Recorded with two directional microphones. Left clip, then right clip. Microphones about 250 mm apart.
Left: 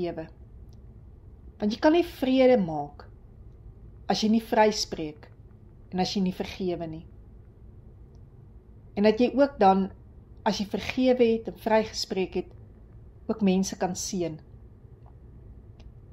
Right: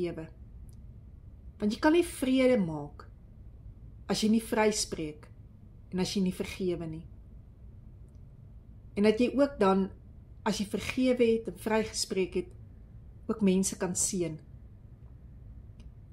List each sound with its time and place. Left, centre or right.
0.0 s a woman's voice: right
1.6 s a woman's voice: right
4.1 s a woman's voice: right
8.9 s a woman's voice: right